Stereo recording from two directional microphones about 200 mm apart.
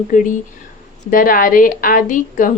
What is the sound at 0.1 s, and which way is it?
A woman's voice, 40° left (ahead or behind).